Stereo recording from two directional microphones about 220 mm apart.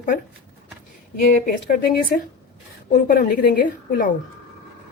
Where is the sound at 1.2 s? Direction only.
40° left (ahead or behind).